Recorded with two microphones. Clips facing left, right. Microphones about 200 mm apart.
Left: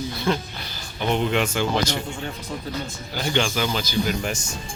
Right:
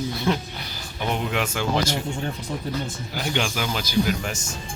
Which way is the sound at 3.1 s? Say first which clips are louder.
Left 3 dB; 5° right (ahead or behind).